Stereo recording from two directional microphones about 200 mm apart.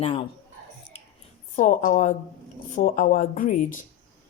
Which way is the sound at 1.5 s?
40° left (ahead or behind).